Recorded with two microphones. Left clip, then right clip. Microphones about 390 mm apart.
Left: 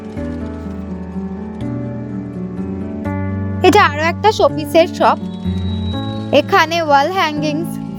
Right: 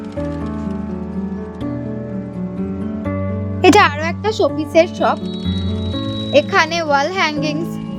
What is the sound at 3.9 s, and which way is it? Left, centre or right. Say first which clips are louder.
A woman's voice: left 5 dB; left.